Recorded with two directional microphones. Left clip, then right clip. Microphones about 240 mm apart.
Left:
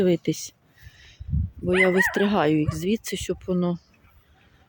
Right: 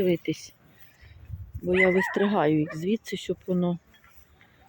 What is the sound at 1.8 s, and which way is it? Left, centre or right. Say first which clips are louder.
Speech: left 2 dB; centre.